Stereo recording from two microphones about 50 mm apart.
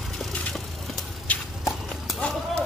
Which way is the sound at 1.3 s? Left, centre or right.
Left.